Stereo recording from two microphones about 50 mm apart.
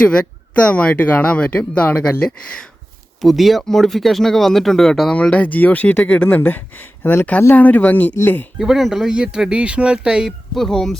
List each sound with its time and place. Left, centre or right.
0.0 s speech: centre
3.2 s speech: centre
5.1 s speech: left
8.5 s speech: centre
10.5 s speech: centre